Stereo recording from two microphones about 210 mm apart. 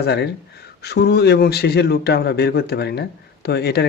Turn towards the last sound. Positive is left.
turn(degrees=50)  # may be behind; listen again after turning